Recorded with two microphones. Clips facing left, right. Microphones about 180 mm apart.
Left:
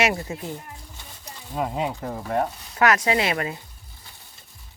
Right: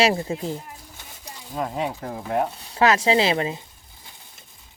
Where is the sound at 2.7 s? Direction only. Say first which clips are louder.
Right 2 dB; 25° right (ahead or behind).